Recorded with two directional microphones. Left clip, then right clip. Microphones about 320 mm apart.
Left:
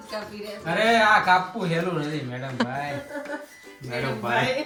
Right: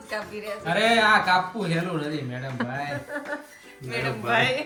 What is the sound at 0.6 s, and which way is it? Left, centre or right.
Speech, centre.